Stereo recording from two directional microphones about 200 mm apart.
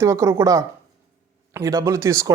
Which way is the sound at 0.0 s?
15° right (ahead or behind).